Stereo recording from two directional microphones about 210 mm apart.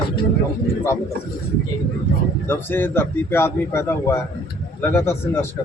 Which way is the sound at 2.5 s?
10° left (ahead or behind).